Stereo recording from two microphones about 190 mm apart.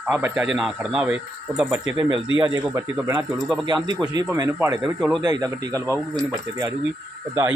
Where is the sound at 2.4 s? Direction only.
20° right (ahead or behind).